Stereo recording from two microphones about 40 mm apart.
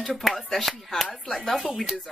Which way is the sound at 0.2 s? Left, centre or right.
Centre.